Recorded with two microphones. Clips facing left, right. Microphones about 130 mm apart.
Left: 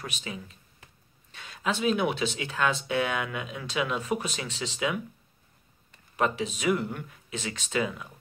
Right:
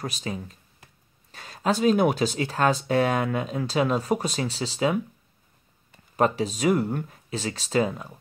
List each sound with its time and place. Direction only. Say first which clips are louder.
0.0 s speech: right 6 dB; 40° right (ahead or behind)
6.1 s speech: right 5 dB; 40° right (ahead or behind)